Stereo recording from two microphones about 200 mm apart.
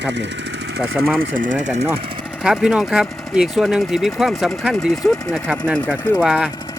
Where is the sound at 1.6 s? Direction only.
35° right (ahead or behind).